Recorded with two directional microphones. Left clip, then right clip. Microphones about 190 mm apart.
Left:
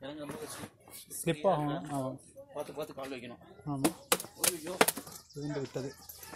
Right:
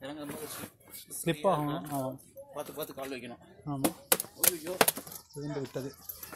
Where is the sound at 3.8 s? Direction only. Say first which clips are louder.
Even; 50° right (ahead or behind).